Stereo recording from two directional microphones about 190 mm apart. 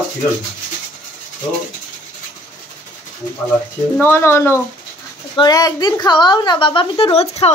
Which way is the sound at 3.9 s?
10° left (ahead or behind).